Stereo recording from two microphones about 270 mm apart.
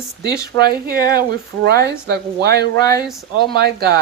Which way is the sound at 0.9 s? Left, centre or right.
Right.